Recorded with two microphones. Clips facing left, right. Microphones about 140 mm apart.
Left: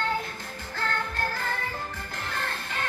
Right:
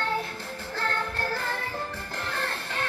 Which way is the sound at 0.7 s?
35° right (ahead or behind).